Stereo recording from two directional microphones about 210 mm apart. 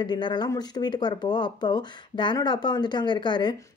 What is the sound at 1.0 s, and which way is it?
Speech, 20° left (ahead or behind).